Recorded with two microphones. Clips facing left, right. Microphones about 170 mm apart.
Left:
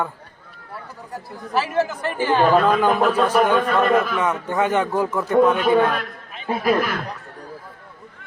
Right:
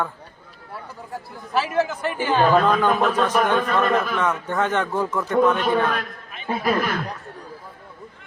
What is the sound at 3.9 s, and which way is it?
A man's voice, 10° left (ahead or behind).